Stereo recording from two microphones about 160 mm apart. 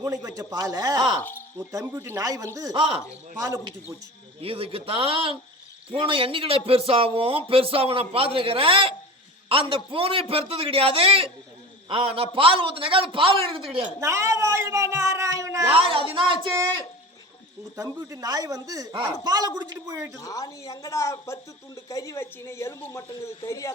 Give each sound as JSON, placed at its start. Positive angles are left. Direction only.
{"t": 0.0, "sound": "a man's voice", "side_deg": -20}
{"t": 1.2, "sound": "speech", "side_deg": 10}
{"t": 1.5, "sound": "a man's voice", "side_deg": -15}
{"t": 2.7, "sound": "speech", "side_deg": -35}
{"t": 3.4, "sound": "a man's voice", "side_deg": -20}
{"t": 4.4, "sound": "speech", "side_deg": -35}
{"t": 14.0, "sound": "speech", "side_deg": -15}
{"t": 15.9, "sound": "speech", "side_deg": -35}
{"t": 17.7, "sound": "a man's voice", "side_deg": -20}
{"t": 20.1, "sound": "speech", "side_deg": 20}